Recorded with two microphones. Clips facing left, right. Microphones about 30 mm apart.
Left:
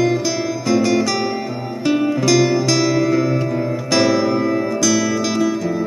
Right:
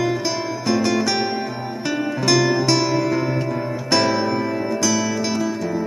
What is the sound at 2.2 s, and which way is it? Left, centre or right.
Music, left.